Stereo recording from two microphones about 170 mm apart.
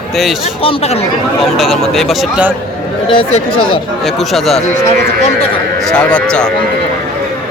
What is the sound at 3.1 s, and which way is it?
Speech, 30° left (ahead or behind).